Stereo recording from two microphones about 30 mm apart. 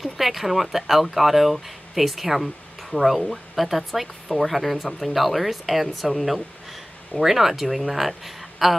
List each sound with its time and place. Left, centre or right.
0.0 s speech: centre